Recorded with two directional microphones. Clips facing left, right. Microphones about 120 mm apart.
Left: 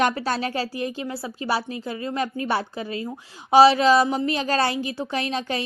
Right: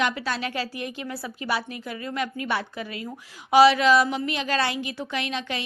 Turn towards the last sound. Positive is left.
turn(degrees=35)  # may be behind; listen again after turning